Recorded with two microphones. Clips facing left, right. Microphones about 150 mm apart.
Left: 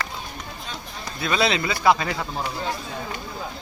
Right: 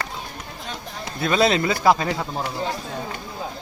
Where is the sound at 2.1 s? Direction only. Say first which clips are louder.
Right 2 dB; 10° right (ahead or behind).